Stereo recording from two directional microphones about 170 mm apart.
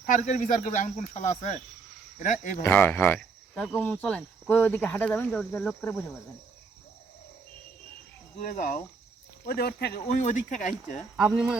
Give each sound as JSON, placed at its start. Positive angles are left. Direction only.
{"t": 0.0, "sound": "speech", "side_deg": 45}
{"t": 2.6, "sound": "speech", "side_deg": 10}
{"t": 8.4, "sound": "speech", "side_deg": 50}
{"t": 9.5, "sound": "speech", "side_deg": 65}
{"t": 10.1, "sound": "speech", "side_deg": 45}